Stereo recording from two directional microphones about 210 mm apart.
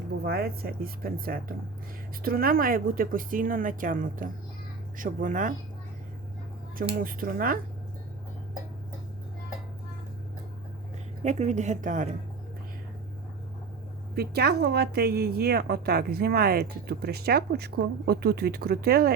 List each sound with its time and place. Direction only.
0.3 s a woman's voice: 45° right (ahead or behind)
7.0 s speech: 40° right (ahead or behind)
11.2 s speech: 35° right (ahead or behind)
14.2 s a woman's voice: 50° right (ahead or behind)